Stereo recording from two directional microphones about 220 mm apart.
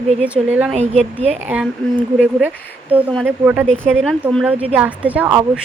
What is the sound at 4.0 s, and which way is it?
A woman's voice, centre (ahead or behind).